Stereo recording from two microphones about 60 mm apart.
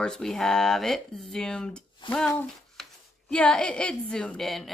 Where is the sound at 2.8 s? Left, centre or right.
Centre.